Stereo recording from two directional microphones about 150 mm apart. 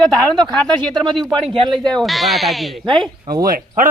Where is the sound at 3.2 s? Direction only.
85° right.